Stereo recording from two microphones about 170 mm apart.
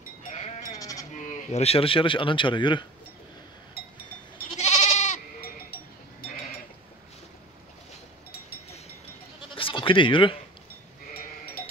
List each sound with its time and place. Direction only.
0.2 s sheep: 45° left (ahead or behind)
0.7 s sheep: 20° left (ahead or behind)
1.2 s speech: 45° left (ahead or behind); by 2.9 s 30° left (ahead or behind)
4.6 s goat: 40° left (ahead or behind)
9.4 s bleat: 30° left (ahead or behind)